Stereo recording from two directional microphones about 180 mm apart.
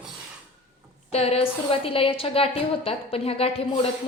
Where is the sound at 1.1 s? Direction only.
35° left (ahead or behind).